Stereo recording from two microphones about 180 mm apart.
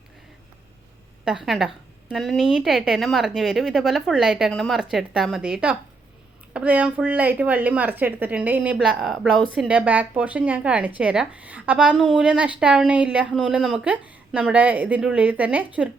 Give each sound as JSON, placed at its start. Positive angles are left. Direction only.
{"t": 1.2, "sound": "a woman's voice", "side_deg": -5}